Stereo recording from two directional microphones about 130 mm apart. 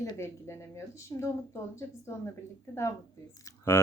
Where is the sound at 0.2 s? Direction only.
20° left (ahead or behind).